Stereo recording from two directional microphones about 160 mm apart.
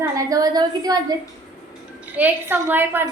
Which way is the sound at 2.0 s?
10° right (ahead or behind).